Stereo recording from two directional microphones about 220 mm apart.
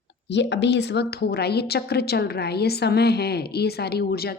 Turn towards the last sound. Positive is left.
turn(degrees=45)  # may be behind; listen again after turning